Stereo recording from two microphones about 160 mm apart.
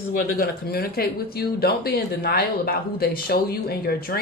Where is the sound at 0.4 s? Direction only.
75° left (ahead or behind).